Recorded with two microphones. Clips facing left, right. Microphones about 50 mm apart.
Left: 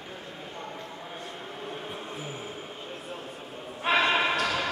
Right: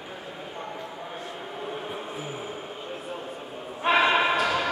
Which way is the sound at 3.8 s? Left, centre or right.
Centre.